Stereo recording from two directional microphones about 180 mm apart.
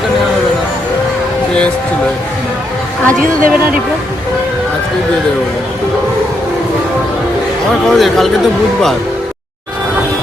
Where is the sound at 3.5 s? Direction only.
5° right (ahead or behind).